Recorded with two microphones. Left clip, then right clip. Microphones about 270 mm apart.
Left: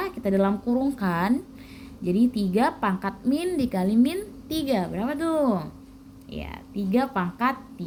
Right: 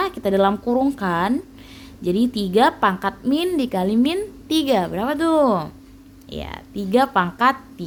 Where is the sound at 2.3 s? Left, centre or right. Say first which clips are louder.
Right 7 dB; right.